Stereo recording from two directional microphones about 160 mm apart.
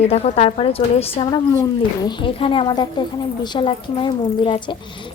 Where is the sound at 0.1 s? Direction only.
40° left (ahead or behind).